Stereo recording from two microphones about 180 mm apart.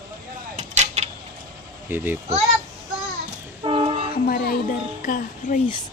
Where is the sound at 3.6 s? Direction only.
30° right (ahead or behind).